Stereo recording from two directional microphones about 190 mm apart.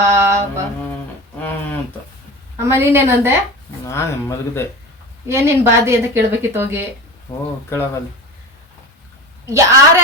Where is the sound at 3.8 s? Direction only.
15° left (ahead or behind).